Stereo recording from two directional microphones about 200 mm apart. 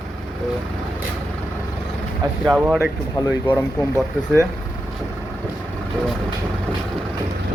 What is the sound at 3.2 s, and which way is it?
Speech, 10° left (ahead or behind).